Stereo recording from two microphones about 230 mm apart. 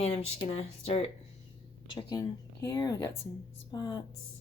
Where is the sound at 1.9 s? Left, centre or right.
Centre.